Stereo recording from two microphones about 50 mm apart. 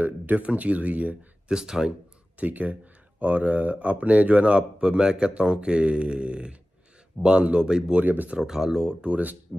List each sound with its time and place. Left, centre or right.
0.0 s speech: right
1.5 s speech: centre
2.3 s speech: right
8.0 s speech: right
8.4 s speech: centre
9.1 s speech: right